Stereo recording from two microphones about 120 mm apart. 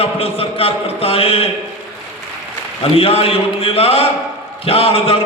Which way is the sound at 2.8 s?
50° left (ahead or behind).